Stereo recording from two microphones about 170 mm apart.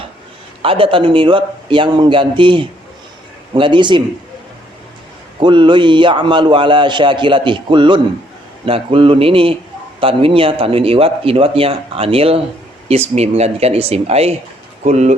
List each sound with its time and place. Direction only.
0.6 s speech: 30° right (ahead or behind)
5.4 s speech: 30° right (ahead or behind)